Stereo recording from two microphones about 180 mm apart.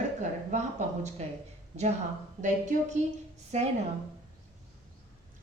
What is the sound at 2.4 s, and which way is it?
A woman's voice, 45° right (ahead or behind).